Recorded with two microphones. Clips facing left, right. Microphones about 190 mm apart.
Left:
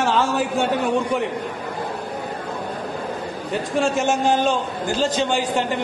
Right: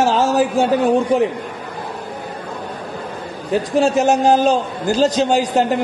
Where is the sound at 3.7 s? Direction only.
40° right (ahead or behind).